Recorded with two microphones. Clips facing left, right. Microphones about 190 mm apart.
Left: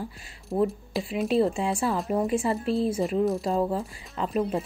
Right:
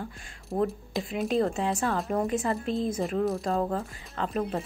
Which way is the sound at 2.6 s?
40° left (ahead or behind).